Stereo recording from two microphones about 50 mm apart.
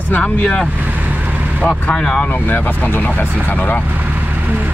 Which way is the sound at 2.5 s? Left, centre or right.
Left.